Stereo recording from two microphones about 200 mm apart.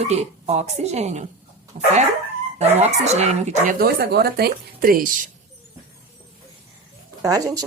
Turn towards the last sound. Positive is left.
turn(degrees=-20)  # may be behind; listen again after turning